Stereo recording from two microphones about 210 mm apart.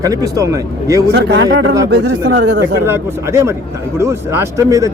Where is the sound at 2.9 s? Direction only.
15° right (ahead or behind).